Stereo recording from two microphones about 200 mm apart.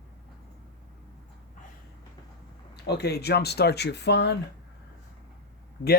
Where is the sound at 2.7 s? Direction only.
55° left (ahead or behind).